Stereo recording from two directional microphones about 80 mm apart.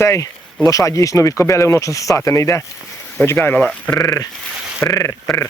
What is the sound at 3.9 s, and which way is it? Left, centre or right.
Speech, left.